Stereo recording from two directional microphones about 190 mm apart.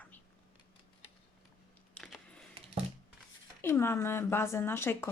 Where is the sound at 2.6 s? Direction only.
30° right (ahead or behind).